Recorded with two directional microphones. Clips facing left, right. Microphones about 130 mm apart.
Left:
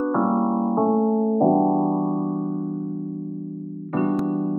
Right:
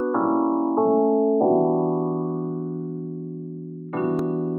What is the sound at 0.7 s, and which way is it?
Music, 5° right (ahead or behind).